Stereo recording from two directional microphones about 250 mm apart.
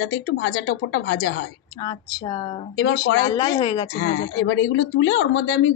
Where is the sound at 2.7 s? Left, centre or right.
Left.